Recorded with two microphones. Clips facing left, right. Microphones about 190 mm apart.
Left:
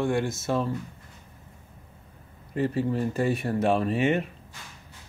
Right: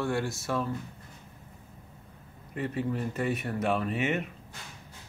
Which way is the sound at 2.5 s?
30° left (ahead or behind).